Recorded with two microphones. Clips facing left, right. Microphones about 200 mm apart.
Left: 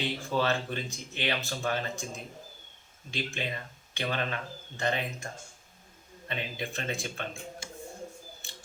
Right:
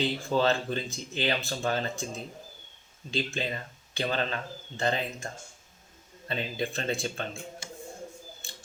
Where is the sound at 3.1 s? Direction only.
35° right (ahead or behind).